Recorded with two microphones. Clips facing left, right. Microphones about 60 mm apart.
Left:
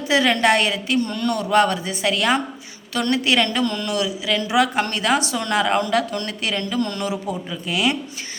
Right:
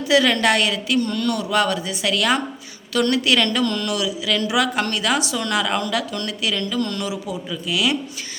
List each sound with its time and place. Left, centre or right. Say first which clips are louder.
0.1 s a woman's voice: even; left